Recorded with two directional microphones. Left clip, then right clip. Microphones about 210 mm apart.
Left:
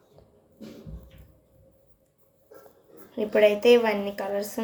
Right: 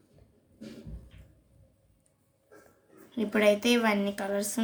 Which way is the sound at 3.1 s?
55° right (ahead or behind).